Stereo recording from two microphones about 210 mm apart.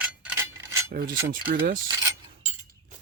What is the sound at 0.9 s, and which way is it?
Speech, 45° right (ahead or behind).